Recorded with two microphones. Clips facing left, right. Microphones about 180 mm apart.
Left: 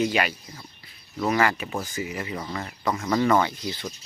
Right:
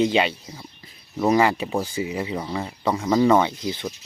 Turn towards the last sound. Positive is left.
turn(degrees=-20)  # may be behind; listen again after turning